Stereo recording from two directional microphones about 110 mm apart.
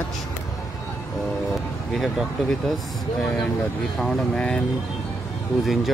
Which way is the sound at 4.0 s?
5° left (ahead or behind).